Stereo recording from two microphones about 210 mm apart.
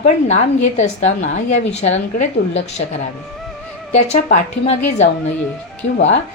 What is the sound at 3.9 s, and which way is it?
A woman's voice, 35° left (ahead or behind).